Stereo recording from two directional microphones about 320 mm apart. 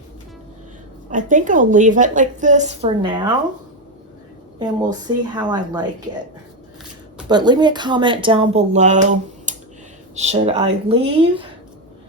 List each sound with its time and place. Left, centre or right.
1.1 s a woman's voice: right
4.6 s a woman's voice: centre
7.3 s a woman's voice: centre